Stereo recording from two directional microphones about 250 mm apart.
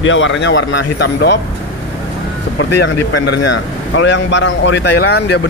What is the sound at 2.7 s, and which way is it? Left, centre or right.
A man's voice, left.